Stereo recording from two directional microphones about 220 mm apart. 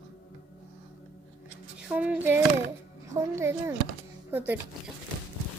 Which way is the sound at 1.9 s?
5° right (ahead or behind).